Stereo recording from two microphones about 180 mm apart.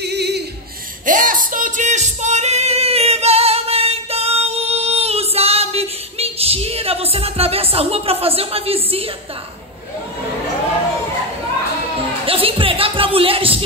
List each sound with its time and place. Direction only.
0.0 s a sound: 70° right (ahead or behind)
1.0 s singing: 45° right (ahead or behind); by 9.1 s 30° right (ahead or behind)
12.3 s speech: 30° right (ahead or behind)